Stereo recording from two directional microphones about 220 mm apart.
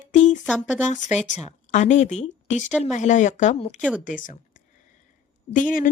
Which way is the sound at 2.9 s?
35° left (ahead or behind).